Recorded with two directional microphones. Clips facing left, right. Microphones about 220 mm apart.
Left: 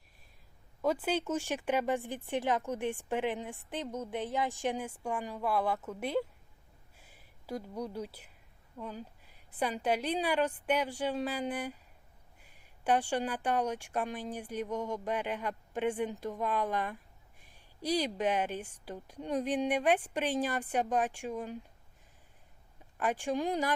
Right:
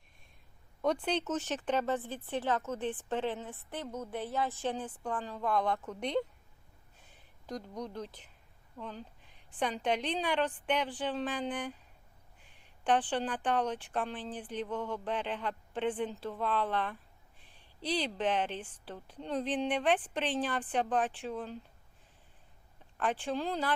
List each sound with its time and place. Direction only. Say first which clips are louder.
0.8 s speech: even; 5° left (ahead or behind)
6.9 s a sound: left 1 dB; 10° left (ahead or behind)
9.6 s speech: left 1 dB; 5° left (ahead or behind)
23.0 s speech: left 2 dB; 10° left (ahead or behind)